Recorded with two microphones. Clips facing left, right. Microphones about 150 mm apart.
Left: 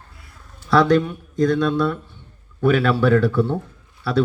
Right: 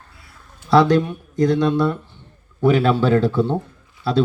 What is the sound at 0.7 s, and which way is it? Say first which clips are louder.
Speech: right 1 dB; 15° right (ahead or behind).